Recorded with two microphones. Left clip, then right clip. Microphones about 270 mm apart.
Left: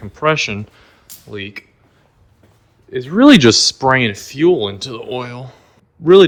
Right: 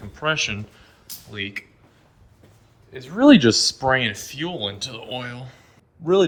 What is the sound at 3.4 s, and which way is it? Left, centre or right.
Speech, left.